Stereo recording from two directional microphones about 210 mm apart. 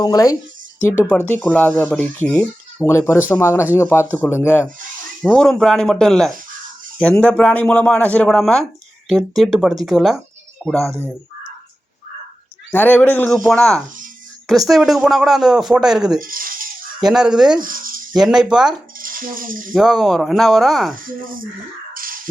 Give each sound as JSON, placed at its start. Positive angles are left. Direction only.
{"t": 0.0, "sound": "speech", "side_deg": 15}
{"t": 12.7, "sound": "speech", "side_deg": 10}
{"t": 16.2, "sound": "a sound", "side_deg": -40}
{"t": 17.0, "sound": "speech", "side_deg": 0}
{"t": 17.6, "sound": "a sound", "side_deg": -40}
{"t": 18.1, "sound": "speech", "side_deg": 0}
{"t": 18.9, "sound": "cutlery", "side_deg": -40}
{"t": 19.7, "sound": "speech", "side_deg": 0}
{"t": 20.9, "sound": "speech", "side_deg": -40}
{"t": 21.9, "sound": "a sound", "side_deg": -40}